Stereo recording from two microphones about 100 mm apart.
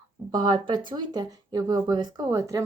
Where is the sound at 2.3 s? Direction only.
30° right (ahead or behind).